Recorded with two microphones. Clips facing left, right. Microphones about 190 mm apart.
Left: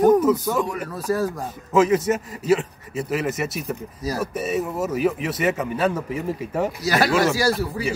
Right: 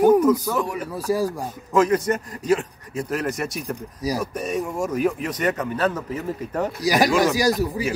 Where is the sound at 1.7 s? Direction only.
5° left (ahead or behind).